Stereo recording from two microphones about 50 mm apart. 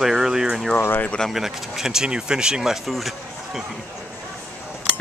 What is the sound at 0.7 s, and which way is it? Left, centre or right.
Speech, left.